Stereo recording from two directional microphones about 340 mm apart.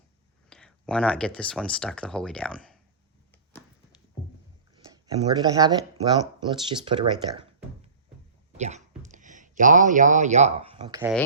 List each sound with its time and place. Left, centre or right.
0.5 s speech: centre
4.7 s a sound: centre
6.4 s speech: centre
8.5 s speech: centre